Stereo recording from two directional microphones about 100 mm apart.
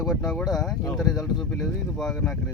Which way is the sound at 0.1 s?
Centre (ahead or behind).